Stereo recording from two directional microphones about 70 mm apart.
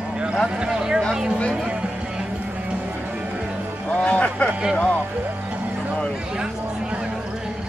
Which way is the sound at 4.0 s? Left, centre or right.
Centre.